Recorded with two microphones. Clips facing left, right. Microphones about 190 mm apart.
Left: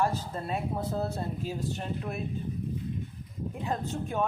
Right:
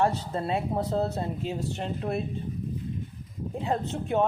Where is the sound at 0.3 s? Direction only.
25° right (ahead or behind).